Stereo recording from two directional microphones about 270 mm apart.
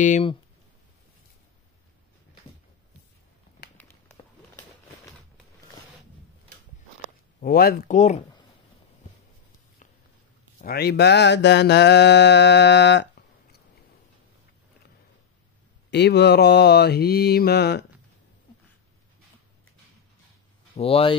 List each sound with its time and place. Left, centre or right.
0.0 s speech: left
3.7 s a sound: centre
7.3 s mantra: left
10.6 s mantra: left
15.9 s mantra: left
20.7 s speech: left